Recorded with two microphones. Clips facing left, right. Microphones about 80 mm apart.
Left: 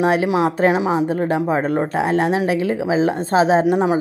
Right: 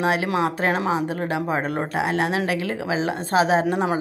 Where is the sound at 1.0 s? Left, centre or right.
Left.